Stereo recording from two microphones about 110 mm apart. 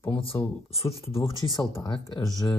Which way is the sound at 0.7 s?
60° left (ahead or behind).